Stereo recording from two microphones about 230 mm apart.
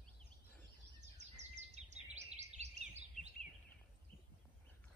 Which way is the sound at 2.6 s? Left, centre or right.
Right.